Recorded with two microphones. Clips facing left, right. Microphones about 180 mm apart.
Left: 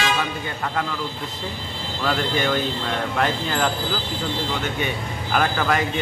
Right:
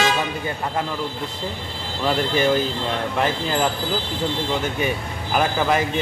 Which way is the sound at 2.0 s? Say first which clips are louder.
Right 3 dB; 30° right (ahead or behind).